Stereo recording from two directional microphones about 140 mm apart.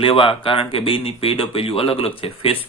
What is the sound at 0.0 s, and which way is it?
Speech, 40° left (ahead or behind).